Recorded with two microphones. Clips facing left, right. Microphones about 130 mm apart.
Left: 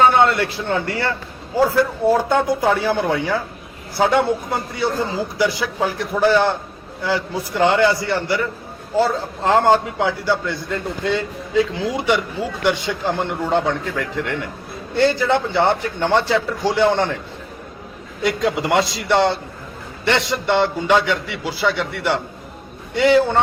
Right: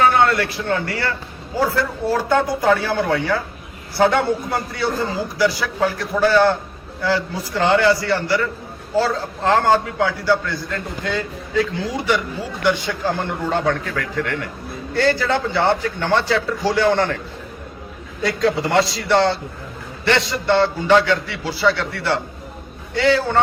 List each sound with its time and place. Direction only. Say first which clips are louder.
0.0 s a man's voice: left 1 dB; 20° left (ahead or behind)
5.4 s a man's voice: right 2 dB; 20° left (ahead or behind)
18.2 s a man's voice: right 1 dB; 15° left (ahead or behind)